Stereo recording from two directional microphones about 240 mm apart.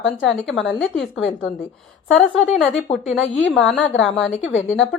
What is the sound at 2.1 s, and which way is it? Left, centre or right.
Speech, centre.